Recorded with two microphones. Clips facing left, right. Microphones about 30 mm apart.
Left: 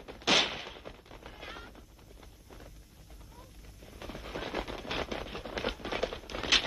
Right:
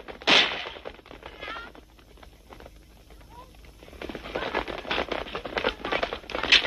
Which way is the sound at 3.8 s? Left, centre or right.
Right.